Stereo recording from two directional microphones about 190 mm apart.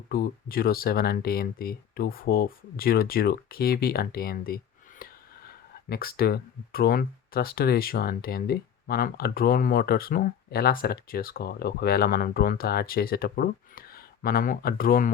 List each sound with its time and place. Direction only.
0.1 s speech: 50° left (ahead or behind)